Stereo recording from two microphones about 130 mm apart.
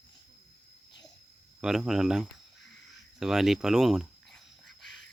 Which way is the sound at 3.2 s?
5° right (ahead or behind).